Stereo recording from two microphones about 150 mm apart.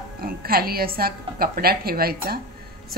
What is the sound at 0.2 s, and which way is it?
A woman's voice, 90° right.